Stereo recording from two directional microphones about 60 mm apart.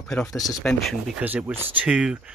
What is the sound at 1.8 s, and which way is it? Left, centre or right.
Speech, centre.